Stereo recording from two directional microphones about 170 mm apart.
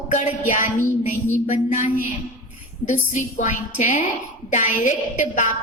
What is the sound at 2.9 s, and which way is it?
A woman's voice, 45° left (ahead or behind).